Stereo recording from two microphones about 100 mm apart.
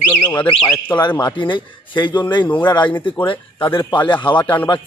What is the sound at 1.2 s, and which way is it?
A man's voice, 50° left (ahead or behind).